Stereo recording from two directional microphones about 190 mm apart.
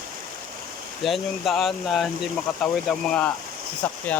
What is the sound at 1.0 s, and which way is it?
Speech, centre (ahead or behind).